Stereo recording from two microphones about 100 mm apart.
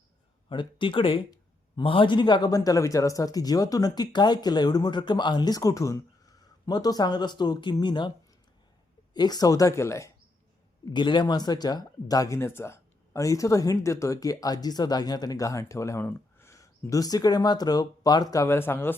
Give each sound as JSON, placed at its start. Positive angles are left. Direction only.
{"t": 0.4, "sound": "speech", "side_deg": 55}
{"t": 9.1, "sound": "speech", "side_deg": 45}
{"t": 10.9, "sound": "speech", "side_deg": 50}